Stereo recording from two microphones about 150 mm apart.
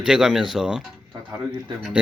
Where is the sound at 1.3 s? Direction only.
30° right (ahead or behind).